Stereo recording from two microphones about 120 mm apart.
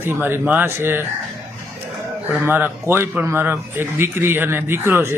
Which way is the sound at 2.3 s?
15° right (ahead or behind).